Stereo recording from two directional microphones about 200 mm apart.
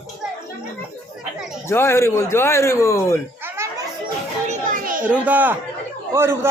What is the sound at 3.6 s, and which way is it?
Children playing, 10° right (ahead or behind).